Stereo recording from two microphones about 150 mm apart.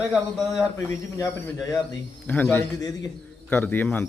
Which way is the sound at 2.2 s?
10° left (ahead or behind).